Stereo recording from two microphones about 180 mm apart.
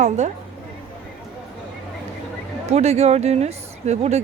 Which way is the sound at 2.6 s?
35° right (ahead or behind).